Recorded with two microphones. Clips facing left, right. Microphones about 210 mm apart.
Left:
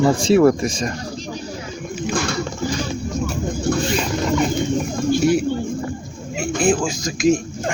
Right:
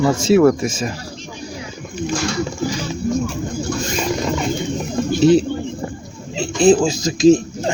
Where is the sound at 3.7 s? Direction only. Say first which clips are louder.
Left 5 dB; 55° left (ahead or behind).